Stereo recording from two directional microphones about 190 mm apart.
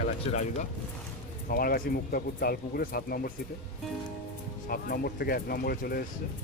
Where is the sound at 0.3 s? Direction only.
35° left (ahead or behind).